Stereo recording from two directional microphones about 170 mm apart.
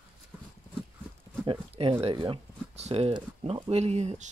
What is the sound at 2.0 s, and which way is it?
Speech, 30° right (ahead or behind).